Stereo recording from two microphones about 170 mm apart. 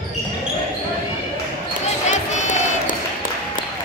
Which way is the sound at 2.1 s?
45° left (ahead or behind).